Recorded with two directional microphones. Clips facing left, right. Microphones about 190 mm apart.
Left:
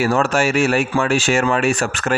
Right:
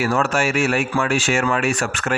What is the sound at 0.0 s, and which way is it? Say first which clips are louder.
Speech: left 3 dB; 35° left (ahead or behind).